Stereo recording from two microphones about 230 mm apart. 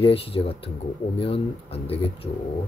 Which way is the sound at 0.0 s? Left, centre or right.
Left.